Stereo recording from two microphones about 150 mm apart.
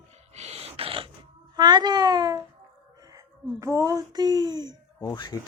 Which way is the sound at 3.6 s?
20° right (ahead or behind).